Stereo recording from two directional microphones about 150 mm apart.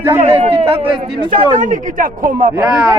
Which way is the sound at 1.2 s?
60° right (ahead or behind).